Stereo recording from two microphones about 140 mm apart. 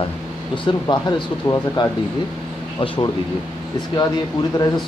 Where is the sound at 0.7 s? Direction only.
35° left (ahead or behind).